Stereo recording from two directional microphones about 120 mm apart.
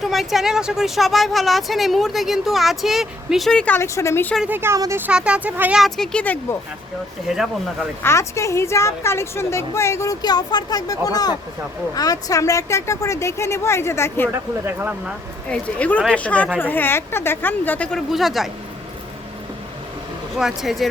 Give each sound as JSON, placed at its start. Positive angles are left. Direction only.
{"t": 0.0, "sound": "speech", "side_deg": 0}
{"t": 3.8, "sound": "a woman's voice", "side_deg": 25}
{"t": 4.4, "sound": "speech", "side_deg": -15}
{"t": 5.8, "sound": "speech", "side_deg": 5}
{"t": 7.3, "sound": "speech", "side_deg": -5}
{"t": 8.0, "sound": "a woman's voice", "side_deg": 25}
{"t": 14.3, "sound": "speech", "side_deg": -15}
{"t": 15.4, "sound": "speech", "side_deg": 10}
{"t": 18.1, "sound": "speech", "side_deg": 0}
{"t": 20.3, "sound": "speech", "side_deg": 0}